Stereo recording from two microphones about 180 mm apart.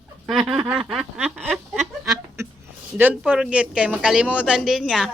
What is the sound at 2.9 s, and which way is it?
A woman's voice, 10° right (ahead or behind).